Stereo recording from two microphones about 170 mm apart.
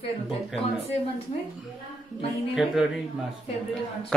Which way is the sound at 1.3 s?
35° left (ahead or behind).